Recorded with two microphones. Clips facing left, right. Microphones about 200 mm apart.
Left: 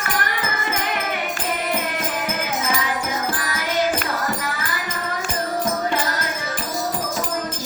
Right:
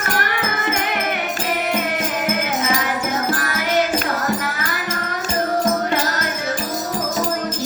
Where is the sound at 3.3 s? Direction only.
50° right (ahead or behind).